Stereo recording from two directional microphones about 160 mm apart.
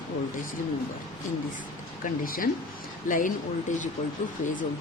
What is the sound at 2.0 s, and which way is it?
Speech, 60° left (ahead or behind).